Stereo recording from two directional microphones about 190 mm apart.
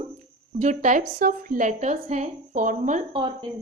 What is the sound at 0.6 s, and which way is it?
A woman's voice, 40° right (ahead or behind).